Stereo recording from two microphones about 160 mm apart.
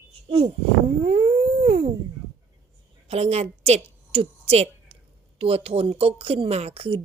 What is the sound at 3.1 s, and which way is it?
A woman's voice, 40° right (ahead or behind).